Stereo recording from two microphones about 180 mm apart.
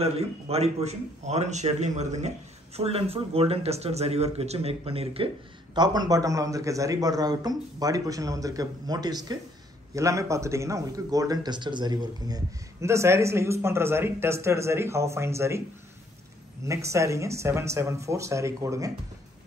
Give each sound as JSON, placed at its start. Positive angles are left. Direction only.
{"t": 0.0, "sound": "speech", "side_deg": -35}
{"t": 5.8, "sound": "a man's voice", "side_deg": -20}
{"t": 16.6, "sound": "speech", "side_deg": -15}